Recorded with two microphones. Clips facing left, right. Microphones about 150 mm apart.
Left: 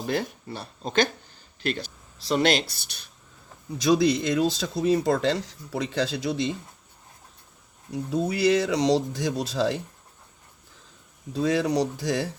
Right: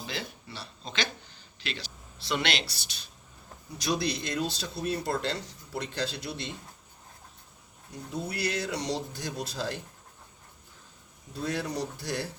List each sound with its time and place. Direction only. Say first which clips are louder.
0.0 s speech: left 10 dB; 50° left (ahead or behind)
4.4 s speech: left 8 dB; 90° left
7.9 s speech: left 9 dB; 90° left
11.3 s speech: left 9 dB; 90° left